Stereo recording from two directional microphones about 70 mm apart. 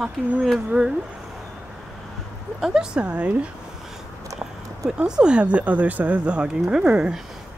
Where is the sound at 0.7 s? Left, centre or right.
Right.